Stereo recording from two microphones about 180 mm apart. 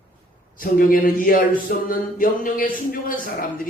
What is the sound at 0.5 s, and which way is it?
Speech, 50° left (ahead or behind).